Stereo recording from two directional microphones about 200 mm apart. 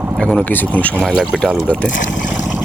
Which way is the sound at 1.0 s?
5° right (ahead or behind).